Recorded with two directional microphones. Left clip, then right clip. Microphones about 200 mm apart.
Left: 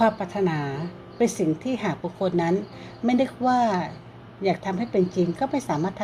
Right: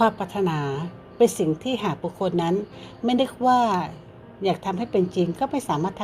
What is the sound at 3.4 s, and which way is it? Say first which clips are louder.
Speech: right 3 dB; 25° right (ahead or behind).